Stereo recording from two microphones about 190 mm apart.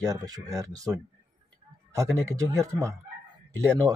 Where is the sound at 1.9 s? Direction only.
15° right (ahead or behind).